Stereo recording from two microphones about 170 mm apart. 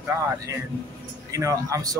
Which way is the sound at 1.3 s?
20° right (ahead or behind).